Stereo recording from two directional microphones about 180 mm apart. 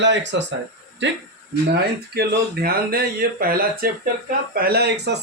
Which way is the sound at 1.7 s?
60° right (ahead or behind).